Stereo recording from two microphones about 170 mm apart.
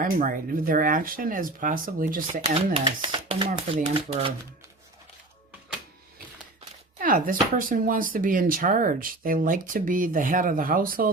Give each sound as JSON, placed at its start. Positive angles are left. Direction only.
{"t": 0.0, "sound": "speech", "side_deg": -55}
{"t": 2.7, "sound": "speech", "side_deg": -35}
{"t": 7.0, "sound": "speech", "side_deg": -55}